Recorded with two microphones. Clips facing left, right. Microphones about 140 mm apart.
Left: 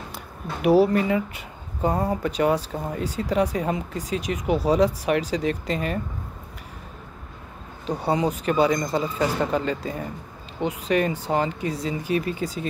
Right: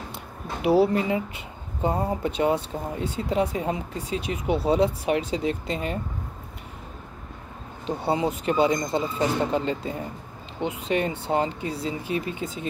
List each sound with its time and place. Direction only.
0.1 s speech: 25° right (ahead or behind)
7.8 s speech: 25° right (ahead or behind)